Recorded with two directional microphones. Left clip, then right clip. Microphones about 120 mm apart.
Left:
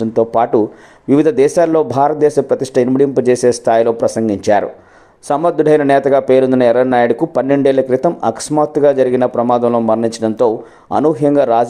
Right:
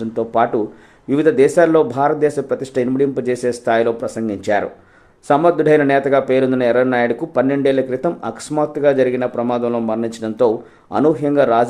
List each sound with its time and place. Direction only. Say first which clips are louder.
0.0 s speech: left 4 dB; 40° left (ahead or behind)